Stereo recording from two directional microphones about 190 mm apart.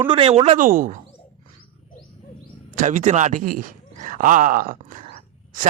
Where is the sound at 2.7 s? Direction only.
40° right (ahead or behind).